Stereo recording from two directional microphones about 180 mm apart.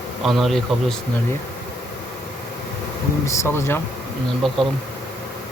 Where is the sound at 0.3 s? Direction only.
Centre (ahead or behind).